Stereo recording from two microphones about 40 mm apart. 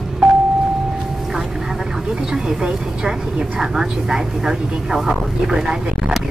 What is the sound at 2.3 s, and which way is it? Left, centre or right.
Speech, centre.